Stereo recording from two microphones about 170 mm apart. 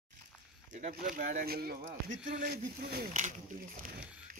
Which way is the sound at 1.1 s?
55° right (ahead or behind).